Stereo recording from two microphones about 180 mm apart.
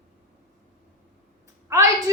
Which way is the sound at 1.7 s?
20° right (ahead or behind).